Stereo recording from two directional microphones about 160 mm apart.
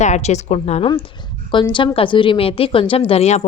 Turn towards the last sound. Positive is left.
turn(degrees=40)  # may be behind; listen again after turning